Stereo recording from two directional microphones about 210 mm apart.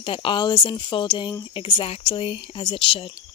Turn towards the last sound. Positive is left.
turn(degrees=25)  # may be behind; listen again after turning